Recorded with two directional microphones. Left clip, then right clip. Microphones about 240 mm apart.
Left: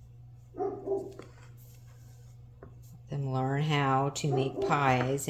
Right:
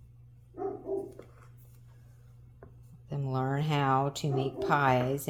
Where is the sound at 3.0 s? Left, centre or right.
Right.